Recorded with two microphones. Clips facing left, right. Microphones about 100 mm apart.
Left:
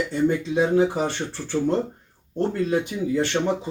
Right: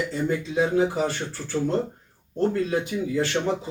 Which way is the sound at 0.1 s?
25° left (ahead or behind).